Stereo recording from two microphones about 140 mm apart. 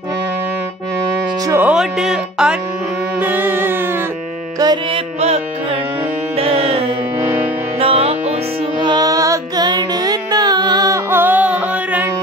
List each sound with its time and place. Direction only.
1.4 s speech: 20° right (ahead or behind)
1.7 s speech: 5° right (ahead or behind)
3.2 s music: 15° right (ahead or behind)
4.9 s carnatic music: 45° right (ahead or behind)
6.3 s music: 45° right (ahead or behind)
7.2 s music: 15° right (ahead or behind)
7.8 s music: 45° right (ahead or behind)
8.7 s music: 30° right (ahead or behind)
11.1 s music: 15° right (ahead or behind)